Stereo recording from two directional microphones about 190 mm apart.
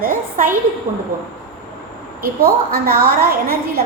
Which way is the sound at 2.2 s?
50° right (ahead or behind).